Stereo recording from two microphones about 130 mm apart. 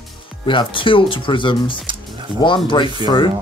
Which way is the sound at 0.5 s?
40° left (ahead or behind).